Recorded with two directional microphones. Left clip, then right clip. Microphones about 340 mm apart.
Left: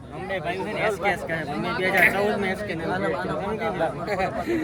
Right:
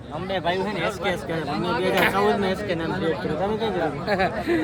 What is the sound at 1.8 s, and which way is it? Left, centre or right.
Speech, centre.